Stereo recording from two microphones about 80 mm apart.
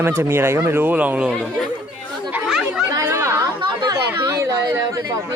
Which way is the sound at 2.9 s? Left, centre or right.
Right.